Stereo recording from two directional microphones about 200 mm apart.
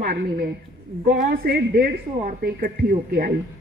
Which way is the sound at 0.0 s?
45° right (ahead or behind).